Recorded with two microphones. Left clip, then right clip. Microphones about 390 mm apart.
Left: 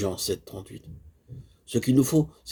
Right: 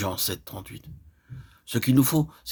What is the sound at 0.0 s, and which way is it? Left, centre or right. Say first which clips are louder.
Speech: left 1 dB; right.